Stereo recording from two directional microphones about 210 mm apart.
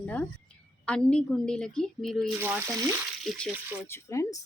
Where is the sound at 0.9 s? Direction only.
5° left (ahead or behind).